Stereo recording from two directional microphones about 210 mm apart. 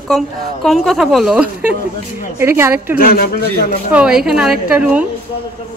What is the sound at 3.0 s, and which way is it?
Speech, 45° left (ahead or behind).